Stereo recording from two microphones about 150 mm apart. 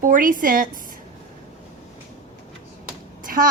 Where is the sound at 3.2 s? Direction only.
65° right (ahead or behind).